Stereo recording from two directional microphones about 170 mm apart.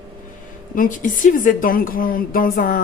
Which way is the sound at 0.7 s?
50° left (ahead or behind).